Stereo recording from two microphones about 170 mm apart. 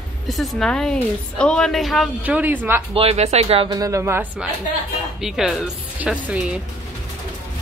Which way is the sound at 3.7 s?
20° right (ahead or behind).